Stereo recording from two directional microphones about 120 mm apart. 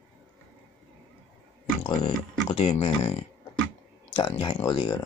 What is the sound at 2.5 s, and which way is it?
Speech, 55° left (ahead or behind).